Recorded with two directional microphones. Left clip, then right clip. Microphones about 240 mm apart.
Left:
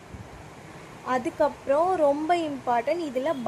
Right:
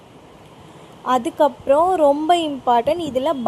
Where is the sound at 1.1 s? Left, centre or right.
Centre.